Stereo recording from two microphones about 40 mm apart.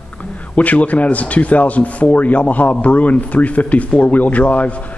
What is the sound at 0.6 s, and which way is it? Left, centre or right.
Speech, left.